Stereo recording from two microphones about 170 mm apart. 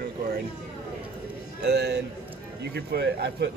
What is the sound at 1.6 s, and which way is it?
Speech, 80° right.